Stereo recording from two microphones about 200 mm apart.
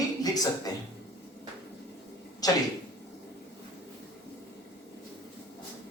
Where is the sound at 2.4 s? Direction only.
20° left (ahead or behind).